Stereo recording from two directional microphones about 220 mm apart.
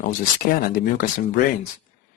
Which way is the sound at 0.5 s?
40° left (ahead or behind).